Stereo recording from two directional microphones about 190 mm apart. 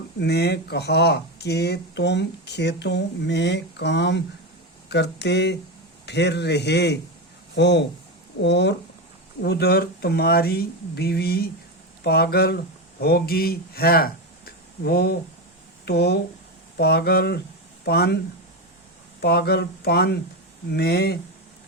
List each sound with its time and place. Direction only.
0.2 s speech: 60° left (ahead or behind)
19.2 s speech: 55° left (ahead or behind)